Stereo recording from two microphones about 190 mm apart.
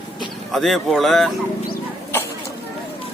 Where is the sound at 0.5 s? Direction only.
Centre (ahead or behind).